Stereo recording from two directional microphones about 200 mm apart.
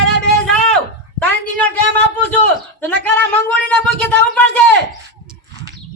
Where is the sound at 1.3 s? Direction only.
5° left (ahead or behind).